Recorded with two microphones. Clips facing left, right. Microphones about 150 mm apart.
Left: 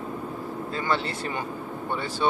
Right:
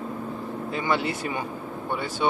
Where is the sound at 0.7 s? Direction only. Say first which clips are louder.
Right 2 dB; 15° right (ahead or behind).